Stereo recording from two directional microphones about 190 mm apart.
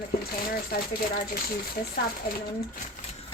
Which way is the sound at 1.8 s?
50° left (ahead or behind).